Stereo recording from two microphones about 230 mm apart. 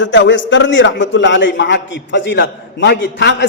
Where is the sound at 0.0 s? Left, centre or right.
Left.